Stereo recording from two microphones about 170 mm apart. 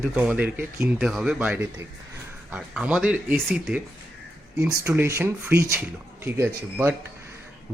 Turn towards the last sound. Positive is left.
turn(degrees=-15)  # may be behind; listen again after turning